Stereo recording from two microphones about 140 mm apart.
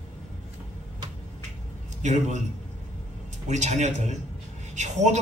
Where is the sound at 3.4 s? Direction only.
55° right (ahead or behind).